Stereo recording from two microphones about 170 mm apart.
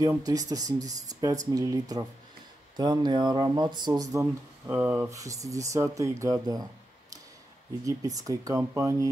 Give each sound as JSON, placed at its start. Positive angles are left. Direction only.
{"t": 0.2, "sound": "speech", "side_deg": -20}
{"t": 7.8, "sound": "speech", "side_deg": -20}